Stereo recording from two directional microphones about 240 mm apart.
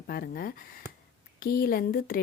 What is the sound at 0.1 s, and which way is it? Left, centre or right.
A woman's voice, left.